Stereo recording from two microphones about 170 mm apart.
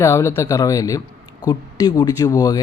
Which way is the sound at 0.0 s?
15° left (ahead or behind).